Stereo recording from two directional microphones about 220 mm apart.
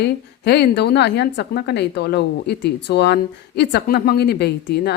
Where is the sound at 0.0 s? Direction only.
50° left (ahead or behind).